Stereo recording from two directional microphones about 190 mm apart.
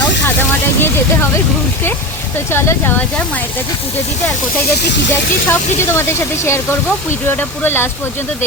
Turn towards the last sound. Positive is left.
turn(degrees=10)  # may be behind; listen again after turning